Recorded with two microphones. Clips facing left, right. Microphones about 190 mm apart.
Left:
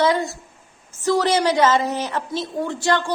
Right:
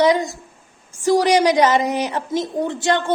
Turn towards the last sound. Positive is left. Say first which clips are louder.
# right 2 dB
turn(degrees=-20)  # may be behind; listen again after turning